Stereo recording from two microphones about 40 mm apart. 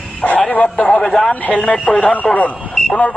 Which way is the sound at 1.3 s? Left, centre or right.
Left.